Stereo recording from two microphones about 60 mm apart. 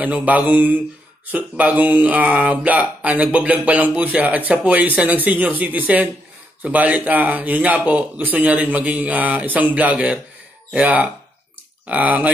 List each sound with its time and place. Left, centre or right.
0.0 s speech: right